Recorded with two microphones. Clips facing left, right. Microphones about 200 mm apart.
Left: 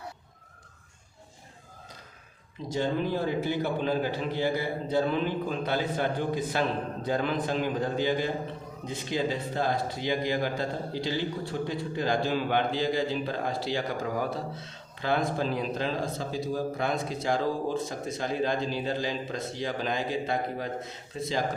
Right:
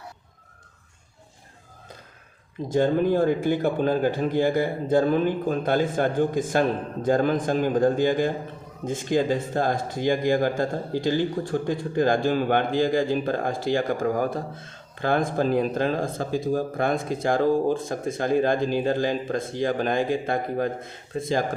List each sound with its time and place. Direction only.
2.6 s speech: 50° right (ahead or behind)